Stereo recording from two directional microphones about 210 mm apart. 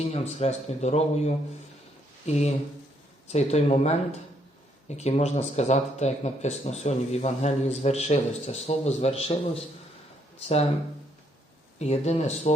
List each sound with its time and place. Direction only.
0.0 s speech: 30° left (ahead or behind)
11.8 s speech: 30° left (ahead or behind)